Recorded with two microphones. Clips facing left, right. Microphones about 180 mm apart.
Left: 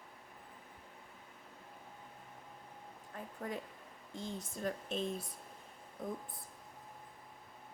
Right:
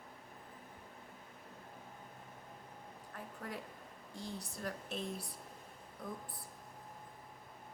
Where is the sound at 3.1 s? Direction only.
20° left (ahead or behind).